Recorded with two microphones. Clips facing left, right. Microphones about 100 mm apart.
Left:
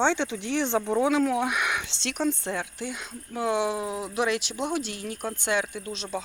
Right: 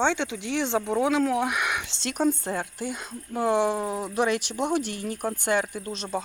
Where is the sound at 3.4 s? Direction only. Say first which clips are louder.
Right 3 dB; 55° right (ahead or behind).